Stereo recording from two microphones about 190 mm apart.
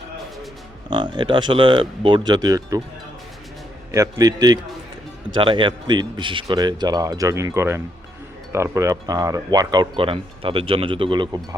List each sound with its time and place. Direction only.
0.9 s speech: 25° right (ahead or behind)
3.9 s speech: 20° right (ahead or behind)